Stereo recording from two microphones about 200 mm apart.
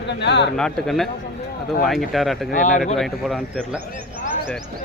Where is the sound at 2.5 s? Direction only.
40° left (ahead or behind).